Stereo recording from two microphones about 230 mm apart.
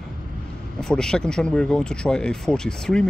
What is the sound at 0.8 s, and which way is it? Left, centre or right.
Speech, centre.